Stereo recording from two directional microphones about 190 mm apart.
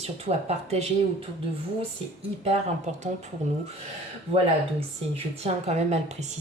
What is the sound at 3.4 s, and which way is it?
Speech, 40° right (ahead or behind).